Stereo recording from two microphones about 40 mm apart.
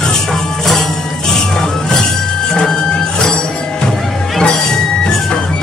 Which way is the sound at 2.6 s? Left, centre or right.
Centre.